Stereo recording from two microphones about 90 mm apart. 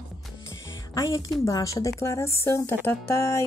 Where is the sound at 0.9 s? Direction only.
40° left (ahead or behind).